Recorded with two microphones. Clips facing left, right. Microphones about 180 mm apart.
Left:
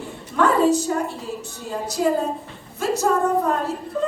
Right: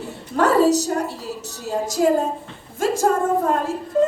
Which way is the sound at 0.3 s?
40° right (ahead or behind).